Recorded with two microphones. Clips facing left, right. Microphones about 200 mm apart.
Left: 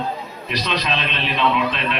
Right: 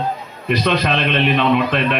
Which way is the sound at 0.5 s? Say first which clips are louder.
Right 6 dB; 55° right (ahead or behind).